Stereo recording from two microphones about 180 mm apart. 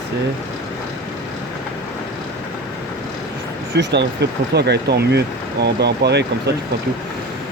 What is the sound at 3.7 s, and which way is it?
Speech, 65° right (ahead or behind).